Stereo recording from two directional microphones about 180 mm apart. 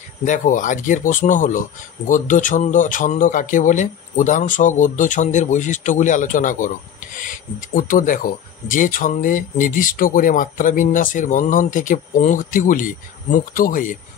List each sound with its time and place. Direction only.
0.2 s speech: 45° left (ahead or behind)